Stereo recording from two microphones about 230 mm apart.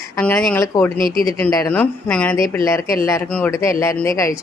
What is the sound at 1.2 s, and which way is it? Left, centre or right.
Speech, centre.